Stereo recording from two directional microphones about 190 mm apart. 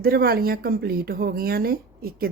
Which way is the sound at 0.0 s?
55° right (ahead or behind).